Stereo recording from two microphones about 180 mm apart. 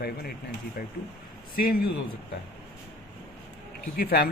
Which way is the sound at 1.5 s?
55° left (ahead or behind).